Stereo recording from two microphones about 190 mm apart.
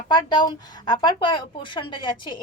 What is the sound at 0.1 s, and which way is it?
Speech, 20° left (ahead or behind).